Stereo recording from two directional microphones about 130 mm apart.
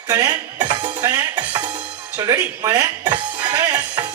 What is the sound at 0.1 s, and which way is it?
Speech, 35° right (ahead or behind).